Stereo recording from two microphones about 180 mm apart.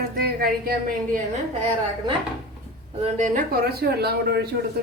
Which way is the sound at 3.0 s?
45° right (ahead or behind).